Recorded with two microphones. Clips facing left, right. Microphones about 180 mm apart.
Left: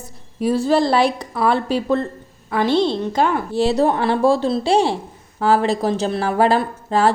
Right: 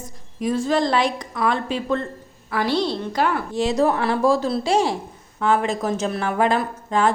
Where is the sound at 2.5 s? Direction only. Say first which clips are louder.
Left 4 dB; 25° left (ahead or behind).